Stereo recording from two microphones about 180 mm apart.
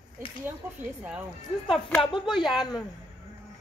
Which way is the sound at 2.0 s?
25° left (ahead or behind).